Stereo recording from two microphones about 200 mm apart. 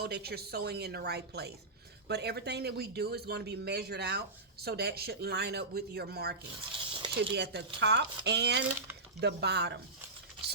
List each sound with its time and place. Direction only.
0.0 s a man's voice: 50° right (ahead or behind)